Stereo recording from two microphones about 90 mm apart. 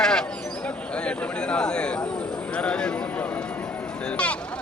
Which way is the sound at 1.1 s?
10° left (ahead or behind).